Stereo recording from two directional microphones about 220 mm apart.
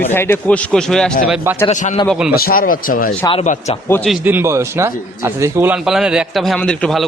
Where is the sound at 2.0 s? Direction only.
5° right (ahead or behind).